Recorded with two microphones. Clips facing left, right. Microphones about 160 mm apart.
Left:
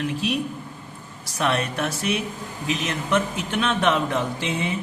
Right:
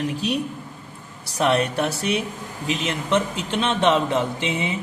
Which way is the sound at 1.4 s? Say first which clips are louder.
Right 4 dB; 35° right (ahead or behind).